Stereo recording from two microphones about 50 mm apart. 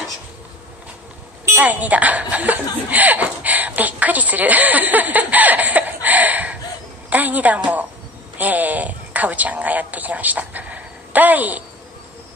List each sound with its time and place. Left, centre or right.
1.6 s a woman's voice: right